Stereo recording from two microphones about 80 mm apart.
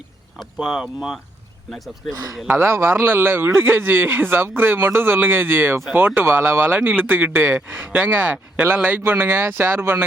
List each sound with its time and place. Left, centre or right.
0.5 s speech: centre
2.5 s a man's voice: right